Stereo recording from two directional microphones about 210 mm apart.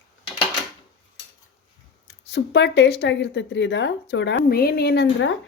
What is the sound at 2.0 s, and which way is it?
A woman's voice, 55° left (ahead or behind).